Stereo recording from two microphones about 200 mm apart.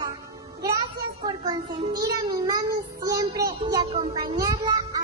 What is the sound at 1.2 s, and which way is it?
Child singing, 20° right (ahead or behind).